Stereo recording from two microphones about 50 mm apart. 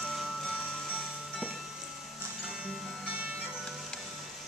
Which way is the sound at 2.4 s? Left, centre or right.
Centre.